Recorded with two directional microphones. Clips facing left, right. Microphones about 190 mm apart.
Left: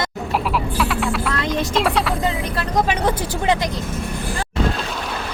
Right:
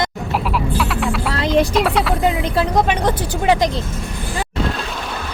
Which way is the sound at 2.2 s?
25° right (ahead or behind).